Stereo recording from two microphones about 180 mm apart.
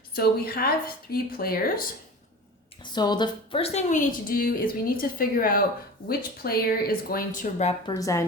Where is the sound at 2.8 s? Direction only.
25° left (ahead or behind); by 7.7 s 40° left (ahead or behind).